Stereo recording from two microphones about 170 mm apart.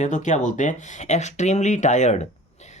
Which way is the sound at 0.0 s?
45° left (ahead or behind).